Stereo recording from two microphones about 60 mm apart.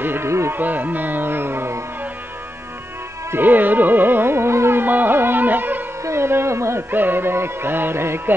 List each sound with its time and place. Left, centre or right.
0.0 s music: right
0.3 s music: right
0.6 s music: right
3.3 s music: right
6.0 s music: right
6.9 s music: right